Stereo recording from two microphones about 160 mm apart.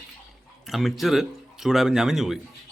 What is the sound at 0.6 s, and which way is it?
Speech, centre (ahead or behind).